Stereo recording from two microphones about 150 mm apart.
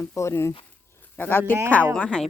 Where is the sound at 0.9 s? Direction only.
15° left (ahead or behind).